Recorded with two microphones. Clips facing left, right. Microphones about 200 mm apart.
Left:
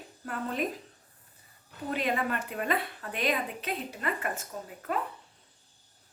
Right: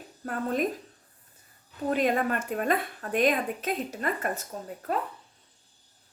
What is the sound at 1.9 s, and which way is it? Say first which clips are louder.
A woman's voice: right 5 dB; 45° right (ahead or behind).